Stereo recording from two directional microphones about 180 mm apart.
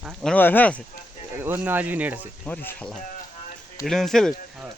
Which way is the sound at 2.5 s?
10° left (ahead or behind).